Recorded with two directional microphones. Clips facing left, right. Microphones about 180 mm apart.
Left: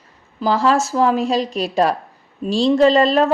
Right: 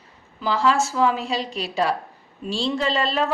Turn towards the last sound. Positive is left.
turn(degrees=45)  # may be behind; listen again after turning